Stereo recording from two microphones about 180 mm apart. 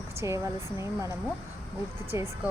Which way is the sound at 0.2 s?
15° right (ahead or behind).